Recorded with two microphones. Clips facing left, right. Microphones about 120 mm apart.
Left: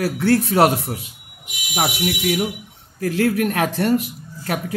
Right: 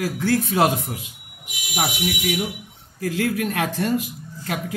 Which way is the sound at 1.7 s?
50° left (ahead or behind).